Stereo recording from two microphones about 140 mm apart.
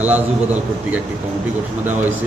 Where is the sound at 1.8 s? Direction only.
15° right (ahead or behind).